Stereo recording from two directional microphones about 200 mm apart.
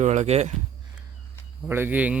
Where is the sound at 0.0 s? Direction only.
35° right (ahead or behind).